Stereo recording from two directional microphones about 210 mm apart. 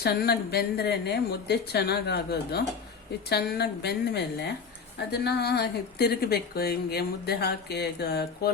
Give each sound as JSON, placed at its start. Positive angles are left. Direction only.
{"t": 0.0, "sound": "a woman's voice", "side_deg": 50}